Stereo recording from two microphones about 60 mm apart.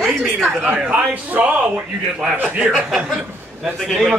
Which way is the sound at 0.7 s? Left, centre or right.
Centre.